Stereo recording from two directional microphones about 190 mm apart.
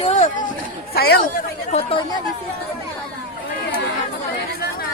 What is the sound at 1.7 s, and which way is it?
Speech, 30° left (ahead or behind).